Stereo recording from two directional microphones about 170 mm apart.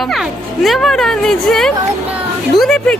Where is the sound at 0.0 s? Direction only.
Centre (ahead or behind).